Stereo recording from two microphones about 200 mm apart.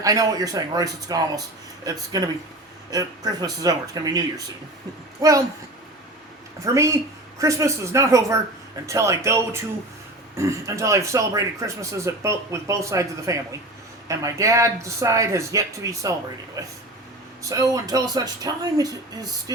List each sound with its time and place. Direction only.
0.0 s speech: 15° right (ahead or behind)
6.6 s speech: 15° right (ahead or behind)